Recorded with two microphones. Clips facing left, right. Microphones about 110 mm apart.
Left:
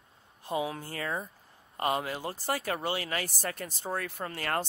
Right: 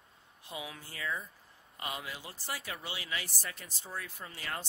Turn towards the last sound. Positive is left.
turn(degrees=60)  # may be behind; listen again after turning